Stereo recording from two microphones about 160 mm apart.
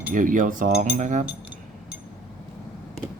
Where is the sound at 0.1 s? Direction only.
55° right (ahead or behind).